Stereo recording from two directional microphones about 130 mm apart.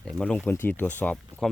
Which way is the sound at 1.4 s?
Centre (ahead or behind).